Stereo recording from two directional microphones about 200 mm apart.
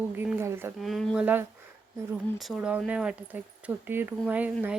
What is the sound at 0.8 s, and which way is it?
Speech, centre (ahead or behind).